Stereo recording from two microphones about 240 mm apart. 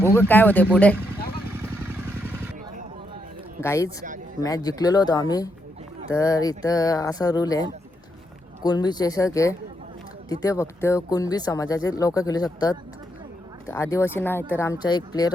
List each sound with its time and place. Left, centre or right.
0.0 s speech: centre
1.5 s vehicle: centre
3.6 s speech: centre
4.0 s a sound: right
4.4 s speech: centre